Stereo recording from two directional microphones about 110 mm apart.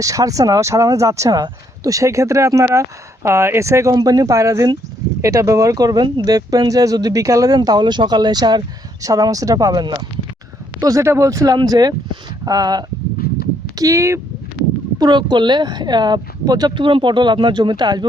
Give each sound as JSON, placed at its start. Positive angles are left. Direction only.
{"t": 0.0, "sound": "speech", "side_deg": -30}
{"t": 14.9, "sound": "speech", "side_deg": -40}